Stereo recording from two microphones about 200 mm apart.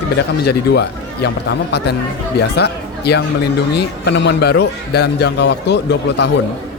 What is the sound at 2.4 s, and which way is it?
Speech, 55° left (ahead or behind).